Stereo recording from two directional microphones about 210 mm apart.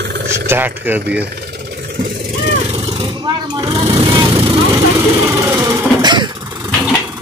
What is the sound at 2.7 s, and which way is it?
Vehicle, 20° right (ahead or behind).